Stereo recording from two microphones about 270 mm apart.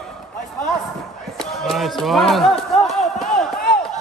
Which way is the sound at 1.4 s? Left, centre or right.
Centre.